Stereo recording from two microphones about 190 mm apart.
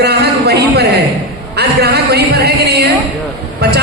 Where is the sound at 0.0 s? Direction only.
55° right (ahead or behind).